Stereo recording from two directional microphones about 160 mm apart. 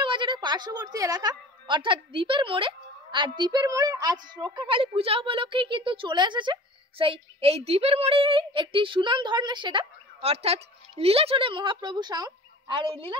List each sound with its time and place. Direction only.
0.0 s a woman's voice: 30° right (ahead or behind)